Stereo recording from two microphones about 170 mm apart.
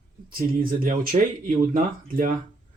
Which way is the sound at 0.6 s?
55° right (ahead or behind).